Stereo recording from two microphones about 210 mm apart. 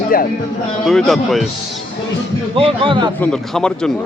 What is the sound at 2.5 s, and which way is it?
Speech, 25° right (ahead or behind).